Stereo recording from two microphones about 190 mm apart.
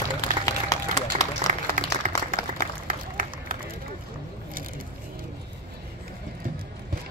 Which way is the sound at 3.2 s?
45° right (ahead or behind).